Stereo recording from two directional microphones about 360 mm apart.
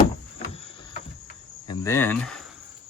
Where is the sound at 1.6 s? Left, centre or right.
Centre.